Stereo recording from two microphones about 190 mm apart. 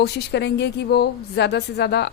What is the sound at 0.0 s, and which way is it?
A woman's voice, 65° left (ahead or behind).